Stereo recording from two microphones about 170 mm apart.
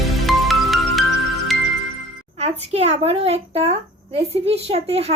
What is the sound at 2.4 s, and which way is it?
A child's voice, 40° right (ahead or behind).